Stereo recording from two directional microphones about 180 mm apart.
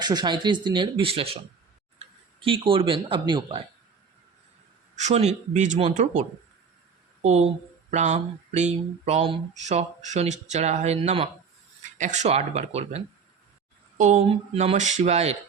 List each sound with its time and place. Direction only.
0.0 s speech: 25° right (ahead or behind)
4.9 s speech: 40° right (ahead or behind)
14.0 s speech: 40° right (ahead or behind)